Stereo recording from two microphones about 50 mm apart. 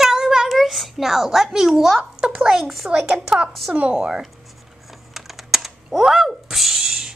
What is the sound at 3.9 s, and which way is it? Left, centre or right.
Speech, centre.